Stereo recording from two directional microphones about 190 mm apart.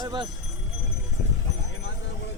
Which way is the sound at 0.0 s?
25° right (ahead or behind).